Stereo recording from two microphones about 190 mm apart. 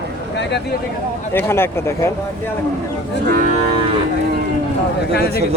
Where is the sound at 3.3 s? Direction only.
45° right (ahead or behind).